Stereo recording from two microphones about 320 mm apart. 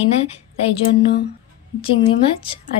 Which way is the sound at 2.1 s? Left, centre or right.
Centre.